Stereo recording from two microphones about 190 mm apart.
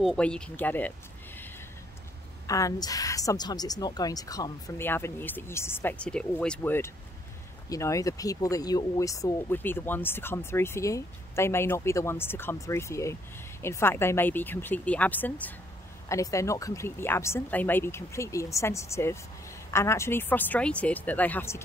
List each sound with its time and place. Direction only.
0.0 s speech: 5° left (ahead or behind)
2.4 s speech: 15° left (ahead or behind)